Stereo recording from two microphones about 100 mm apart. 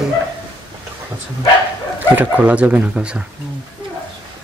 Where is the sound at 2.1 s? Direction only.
15° right (ahead or behind).